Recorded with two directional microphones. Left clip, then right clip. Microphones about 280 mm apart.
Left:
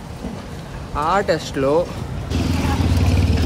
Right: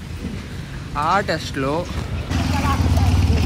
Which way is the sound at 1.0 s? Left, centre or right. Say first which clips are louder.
Left 1 dB; centre.